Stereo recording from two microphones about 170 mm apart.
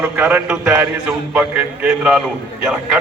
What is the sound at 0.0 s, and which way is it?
A man's voice, 10° right (ahead or behind).